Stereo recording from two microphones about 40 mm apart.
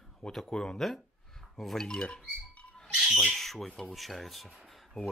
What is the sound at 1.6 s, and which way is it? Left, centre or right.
Speech, centre.